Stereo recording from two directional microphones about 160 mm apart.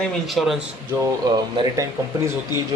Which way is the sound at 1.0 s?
25° right (ahead or behind).